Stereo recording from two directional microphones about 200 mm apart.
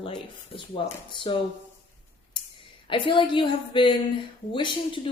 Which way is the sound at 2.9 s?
25° left (ahead or behind).